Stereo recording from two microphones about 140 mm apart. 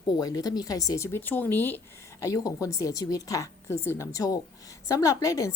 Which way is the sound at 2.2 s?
25° left (ahead or behind).